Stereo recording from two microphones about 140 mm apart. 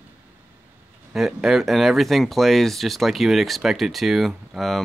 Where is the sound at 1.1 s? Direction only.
Centre (ahead or behind).